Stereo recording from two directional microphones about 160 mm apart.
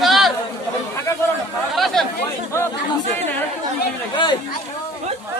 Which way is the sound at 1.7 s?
Centre (ahead or behind).